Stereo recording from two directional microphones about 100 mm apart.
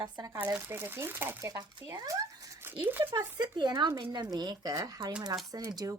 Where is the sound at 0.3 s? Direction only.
25° right (ahead or behind).